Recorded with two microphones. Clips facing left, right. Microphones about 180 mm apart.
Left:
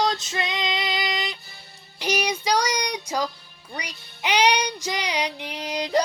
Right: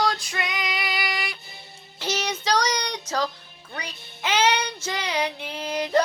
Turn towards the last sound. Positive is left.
turn(degrees=15)  # may be behind; listen again after turning